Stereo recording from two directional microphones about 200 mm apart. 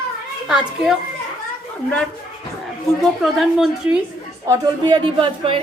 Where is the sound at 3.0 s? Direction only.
Centre (ahead or behind).